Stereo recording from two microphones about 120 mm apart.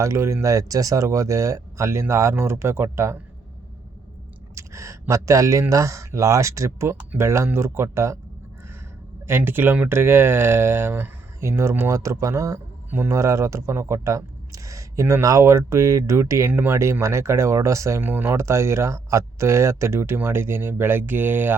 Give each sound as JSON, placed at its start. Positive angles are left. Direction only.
{"t": 0.0, "sound": "speech", "side_deg": -25}
{"t": 4.5, "sound": "speech", "side_deg": -25}
{"t": 9.2, "sound": "speech", "side_deg": -20}